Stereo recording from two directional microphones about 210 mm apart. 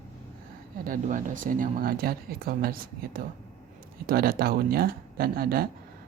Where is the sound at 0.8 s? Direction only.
40° right (ahead or behind).